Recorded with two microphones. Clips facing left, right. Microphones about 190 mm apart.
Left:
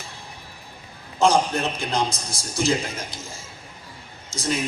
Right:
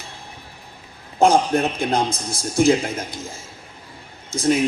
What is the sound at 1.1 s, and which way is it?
Speech, 55° right (ahead or behind).